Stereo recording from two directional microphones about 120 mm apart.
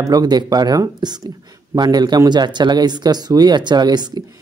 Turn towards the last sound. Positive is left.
turn(degrees=-35)  # may be behind; listen again after turning